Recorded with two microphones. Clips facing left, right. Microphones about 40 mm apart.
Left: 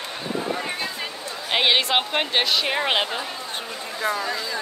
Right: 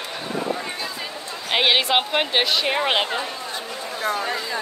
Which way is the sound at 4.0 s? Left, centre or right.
Right.